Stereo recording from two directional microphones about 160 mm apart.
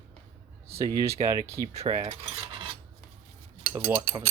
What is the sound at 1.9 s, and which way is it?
Mechanisms, 30° right (ahead or behind).